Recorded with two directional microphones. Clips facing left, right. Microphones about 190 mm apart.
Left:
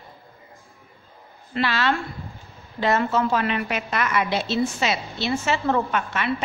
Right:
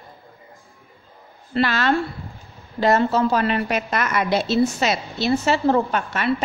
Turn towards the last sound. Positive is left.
turn(degrees=-40)  # may be behind; listen again after turning